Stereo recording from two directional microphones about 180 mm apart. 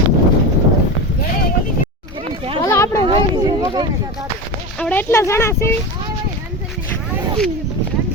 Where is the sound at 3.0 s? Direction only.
25° right (ahead or behind).